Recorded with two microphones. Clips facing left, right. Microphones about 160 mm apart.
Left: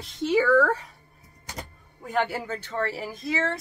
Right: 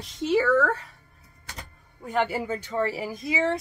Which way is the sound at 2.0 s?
Centre (ahead or behind).